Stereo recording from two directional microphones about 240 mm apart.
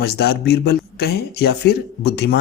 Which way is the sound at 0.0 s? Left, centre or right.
Left.